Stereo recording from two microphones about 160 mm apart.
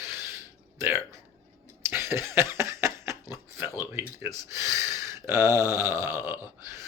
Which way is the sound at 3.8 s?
15° right (ahead or behind).